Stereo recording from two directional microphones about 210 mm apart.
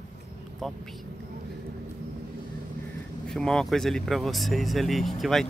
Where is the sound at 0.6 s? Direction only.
Centre (ahead or behind).